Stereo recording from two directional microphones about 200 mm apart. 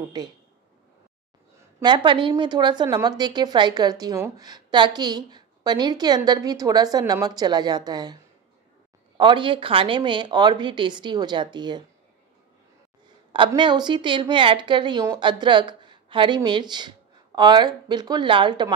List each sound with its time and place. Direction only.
0.2 s a woman's voice: 20° right (ahead or behind)
1.8 s a woman's voice: 20° right (ahead or behind)
13.5 s a woman's voice: 20° right (ahead or behind)